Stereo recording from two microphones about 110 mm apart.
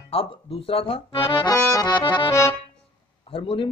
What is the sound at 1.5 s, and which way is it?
Accordion, 30° left (ahead or behind).